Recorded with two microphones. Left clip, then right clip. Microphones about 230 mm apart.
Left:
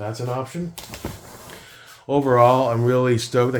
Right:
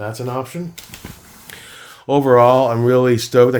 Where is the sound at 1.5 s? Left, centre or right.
Right.